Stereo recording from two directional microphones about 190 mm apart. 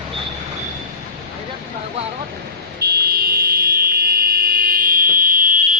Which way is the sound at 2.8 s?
55° right (ahead or behind).